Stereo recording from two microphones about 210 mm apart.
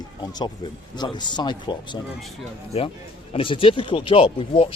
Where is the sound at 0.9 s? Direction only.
20° left (ahead or behind).